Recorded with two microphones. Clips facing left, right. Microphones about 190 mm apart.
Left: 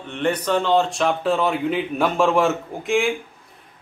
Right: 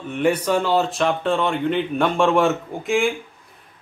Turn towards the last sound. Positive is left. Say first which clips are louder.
# right 1 dB
turn(degrees=0)  # may be behind; listen again after turning